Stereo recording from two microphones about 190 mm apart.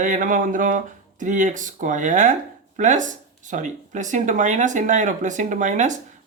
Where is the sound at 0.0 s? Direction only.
45° right (ahead or behind).